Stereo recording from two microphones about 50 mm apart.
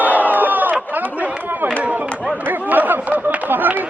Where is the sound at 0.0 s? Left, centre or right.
Right.